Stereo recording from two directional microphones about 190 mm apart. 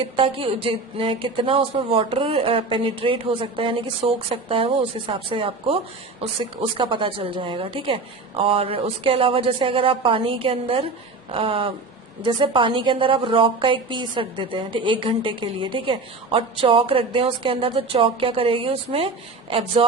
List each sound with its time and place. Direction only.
0.0 s speech: 30° right (ahead or behind)